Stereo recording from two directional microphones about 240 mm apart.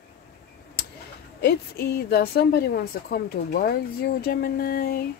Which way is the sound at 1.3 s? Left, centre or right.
Left.